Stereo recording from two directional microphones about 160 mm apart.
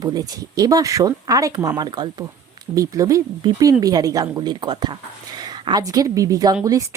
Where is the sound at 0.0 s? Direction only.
25° right (ahead or behind).